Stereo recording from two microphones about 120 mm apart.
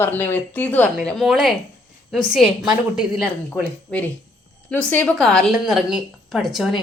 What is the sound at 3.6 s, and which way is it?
A woman's voice, 10° left (ahead or behind).